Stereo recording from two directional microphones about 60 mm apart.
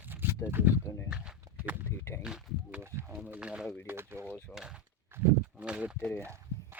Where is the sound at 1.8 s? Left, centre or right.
Left.